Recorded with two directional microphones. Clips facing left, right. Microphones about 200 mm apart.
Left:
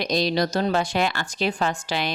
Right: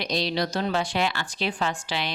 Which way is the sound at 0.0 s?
45° left (ahead or behind).